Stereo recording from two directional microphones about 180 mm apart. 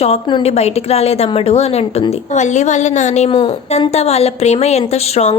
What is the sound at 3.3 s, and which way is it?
A woman's voice, 30° left (ahead or behind).